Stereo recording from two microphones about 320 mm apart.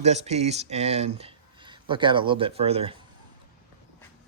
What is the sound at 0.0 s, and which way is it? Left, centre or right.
Speech, right.